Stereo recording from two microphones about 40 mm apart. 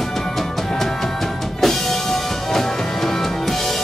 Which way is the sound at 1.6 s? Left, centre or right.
Centre.